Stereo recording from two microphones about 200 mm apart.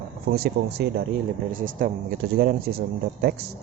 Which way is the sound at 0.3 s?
50° right (ahead or behind).